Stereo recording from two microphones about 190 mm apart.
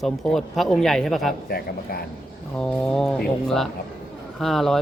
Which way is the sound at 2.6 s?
5° left (ahead or behind).